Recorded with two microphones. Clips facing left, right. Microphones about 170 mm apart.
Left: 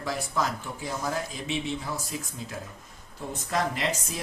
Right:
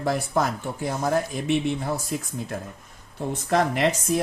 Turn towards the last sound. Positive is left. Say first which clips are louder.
# right 8 dB
turn(degrees=-60)  # may be behind; listen again after turning